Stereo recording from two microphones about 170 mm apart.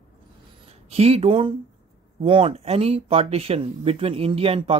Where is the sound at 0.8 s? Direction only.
35° right (ahead or behind).